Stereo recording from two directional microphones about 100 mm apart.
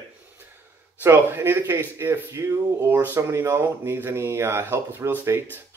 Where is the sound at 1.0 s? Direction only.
25° right (ahead or behind).